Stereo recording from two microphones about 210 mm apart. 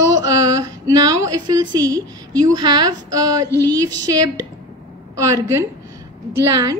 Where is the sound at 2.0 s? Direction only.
15° right (ahead or behind).